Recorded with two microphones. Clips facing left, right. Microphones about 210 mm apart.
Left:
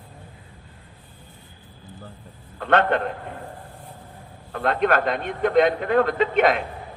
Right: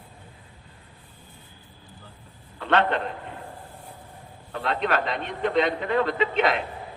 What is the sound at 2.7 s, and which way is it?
Speech, 50° left (ahead or behind).